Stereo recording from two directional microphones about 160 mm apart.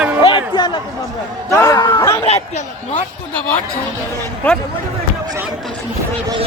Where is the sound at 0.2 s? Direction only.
30° left (ahead or behind).